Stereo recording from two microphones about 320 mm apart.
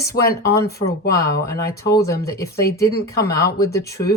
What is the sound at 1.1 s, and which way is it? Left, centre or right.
Speech, centre.